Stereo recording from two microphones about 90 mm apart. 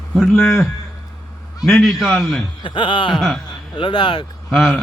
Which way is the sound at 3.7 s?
60° left (ahead or behind).